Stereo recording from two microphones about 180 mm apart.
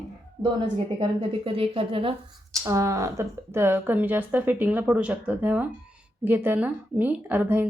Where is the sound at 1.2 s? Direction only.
30° right (ahead or behind).